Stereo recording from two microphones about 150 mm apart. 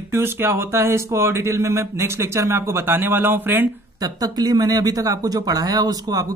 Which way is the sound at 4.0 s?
25° right (ahead or behind).